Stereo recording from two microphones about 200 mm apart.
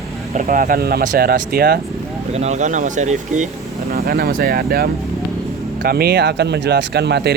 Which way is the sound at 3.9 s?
50° right (ahead or behind).